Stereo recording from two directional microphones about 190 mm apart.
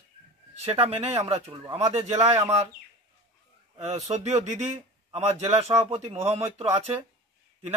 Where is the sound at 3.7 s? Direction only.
35° right (ahead or behind).